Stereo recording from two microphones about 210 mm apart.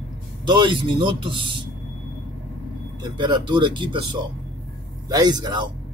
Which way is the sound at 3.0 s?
20° right (ahead or behind).